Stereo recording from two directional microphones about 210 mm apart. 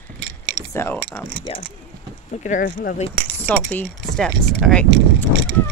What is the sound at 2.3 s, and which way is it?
Speech, 35° left (ahead or behind).